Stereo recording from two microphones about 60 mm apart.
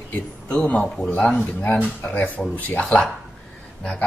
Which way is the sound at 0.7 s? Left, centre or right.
Centre.